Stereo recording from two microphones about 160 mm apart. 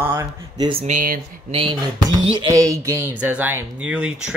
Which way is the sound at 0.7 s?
40° right (ahead or behind).